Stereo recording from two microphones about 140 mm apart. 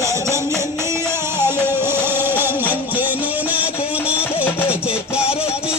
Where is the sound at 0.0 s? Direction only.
20° right (ahead or behind).